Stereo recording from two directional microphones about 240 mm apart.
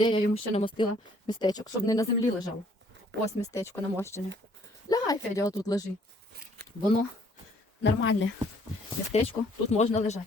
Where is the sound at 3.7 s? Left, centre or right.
Centre.